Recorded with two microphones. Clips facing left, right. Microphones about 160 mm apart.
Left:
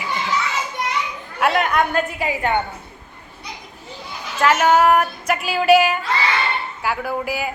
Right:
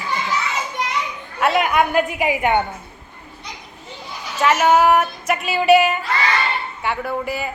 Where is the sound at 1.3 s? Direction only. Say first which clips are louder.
Right 1 dB; centre (ahead or behind).